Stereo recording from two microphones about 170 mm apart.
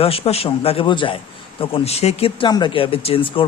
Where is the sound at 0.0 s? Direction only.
35° left (ahead or behind).